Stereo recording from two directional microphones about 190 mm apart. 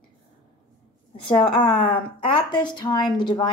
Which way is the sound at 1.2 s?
25° left (ahead or behind).